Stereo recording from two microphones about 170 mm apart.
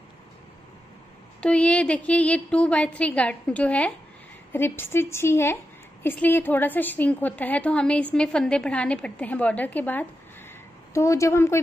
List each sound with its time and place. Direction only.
1.4 s a woman's voice: 5° left (ahead or behind)